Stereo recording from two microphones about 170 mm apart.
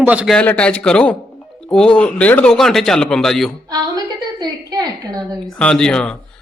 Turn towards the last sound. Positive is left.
turn(degrees=5)  # may be behind; listen again after turning